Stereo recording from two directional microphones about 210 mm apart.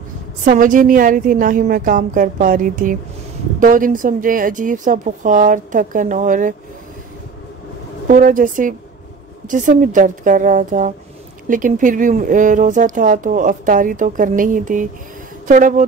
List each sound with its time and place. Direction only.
0.5 s speech: 40° right (ahead or behind)
8.1 s a woman's voice: 40° right (ahead or behind)